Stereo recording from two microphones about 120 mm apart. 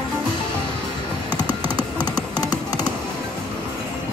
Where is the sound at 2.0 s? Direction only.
35° left (ahead or behind).